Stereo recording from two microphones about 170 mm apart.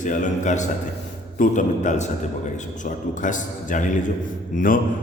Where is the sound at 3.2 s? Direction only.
50° left (ahead or behind).